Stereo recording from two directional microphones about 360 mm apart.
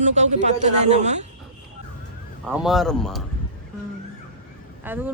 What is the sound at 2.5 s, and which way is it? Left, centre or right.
Speech, centre.